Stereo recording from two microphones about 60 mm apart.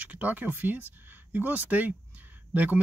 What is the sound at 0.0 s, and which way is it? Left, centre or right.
Speech, right.